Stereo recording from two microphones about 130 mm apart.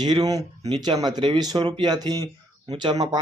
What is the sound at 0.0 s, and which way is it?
Speech, 30° right (ahead or behind).